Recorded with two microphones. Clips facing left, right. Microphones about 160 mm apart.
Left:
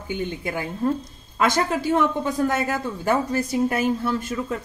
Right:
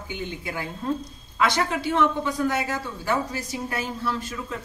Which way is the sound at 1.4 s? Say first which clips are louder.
Left 2 dB; 45° left (ahead or behind).